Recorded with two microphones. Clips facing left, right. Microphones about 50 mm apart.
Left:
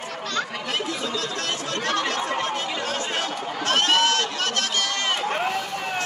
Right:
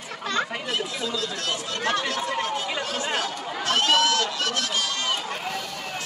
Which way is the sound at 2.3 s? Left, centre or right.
Left.